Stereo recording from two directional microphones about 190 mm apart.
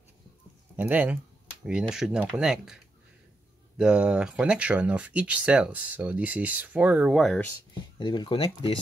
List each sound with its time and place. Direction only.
0.7 s speech: 10° right (ahead or behind)
8.0 s speech: 25° left (ahead or behind)